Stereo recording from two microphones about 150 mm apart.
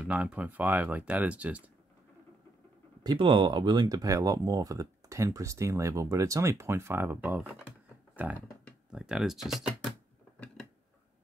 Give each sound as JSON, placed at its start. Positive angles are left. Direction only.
{"t": 0.0, "sound": "speech", "side_deg": -10}
{"t": 3.0, "sound": "speech", "side_deg": -30}
{"t": 8.9, "sound": "speech", "side_deg": -5}